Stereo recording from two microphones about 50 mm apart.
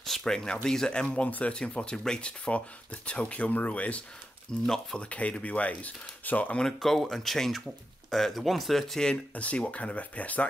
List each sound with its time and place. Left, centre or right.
0.0 s a sound: centre
0.7 s speech: centre
4.5 s speech: centre; by 6.6 s left
6.6 s speech: centre
9.3 s speech: left